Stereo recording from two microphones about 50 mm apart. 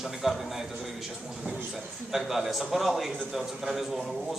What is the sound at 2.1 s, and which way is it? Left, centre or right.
A man's voice, centre.